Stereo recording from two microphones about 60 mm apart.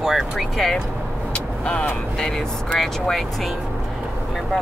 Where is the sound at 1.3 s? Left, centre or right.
Left.